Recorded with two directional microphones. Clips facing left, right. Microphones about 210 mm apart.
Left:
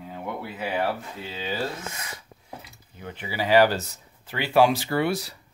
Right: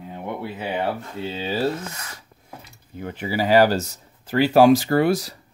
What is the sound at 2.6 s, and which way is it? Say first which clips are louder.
Speech: right 8 dB; 45° right (ahead or behind).